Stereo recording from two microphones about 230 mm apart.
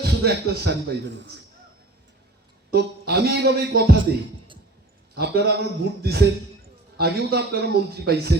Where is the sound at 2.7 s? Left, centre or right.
Right.